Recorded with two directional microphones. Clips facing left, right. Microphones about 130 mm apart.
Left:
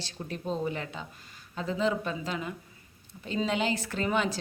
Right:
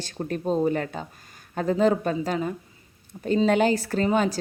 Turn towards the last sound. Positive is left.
turn(degrees=-40)  # may be behind; listen again after turning